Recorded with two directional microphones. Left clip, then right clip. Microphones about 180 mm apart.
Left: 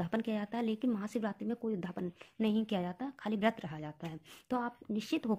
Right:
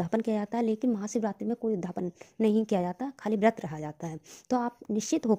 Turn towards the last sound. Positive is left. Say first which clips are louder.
# right 8 dB
turn(degrees=-40)  # may be behind; listen again after turning